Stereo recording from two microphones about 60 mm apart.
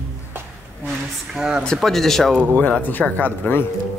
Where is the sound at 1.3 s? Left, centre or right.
Centre.